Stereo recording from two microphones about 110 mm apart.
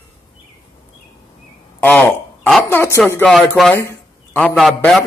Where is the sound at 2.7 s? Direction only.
20° left (ahead or behind).